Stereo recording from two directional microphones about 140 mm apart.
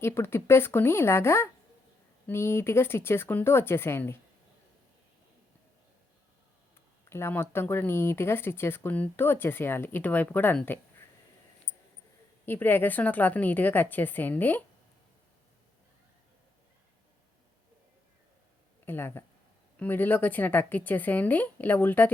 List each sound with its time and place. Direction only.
0.0 s speech: 15° left (ahead or behind)
7.1 s speech: 15° left (ahead or behind)
12.5 s speech: 15° left (ahead or behind)
18.9 s speech: 15° left (ahead or behind)